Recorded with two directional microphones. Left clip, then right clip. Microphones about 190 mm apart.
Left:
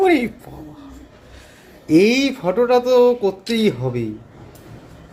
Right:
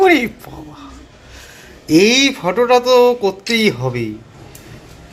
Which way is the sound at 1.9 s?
10° left (ahead or behind).